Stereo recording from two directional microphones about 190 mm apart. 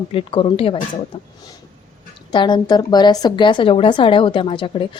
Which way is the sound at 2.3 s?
25° left (ahead or behind).